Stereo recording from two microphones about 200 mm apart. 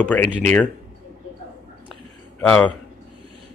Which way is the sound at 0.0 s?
5° left (ahead or behind).